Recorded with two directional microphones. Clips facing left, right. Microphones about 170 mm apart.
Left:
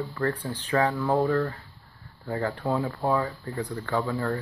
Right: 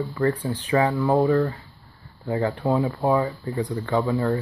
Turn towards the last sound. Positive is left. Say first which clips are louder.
# right 5 dB
turn(degrees=-20)  # may be behind; listen again after turning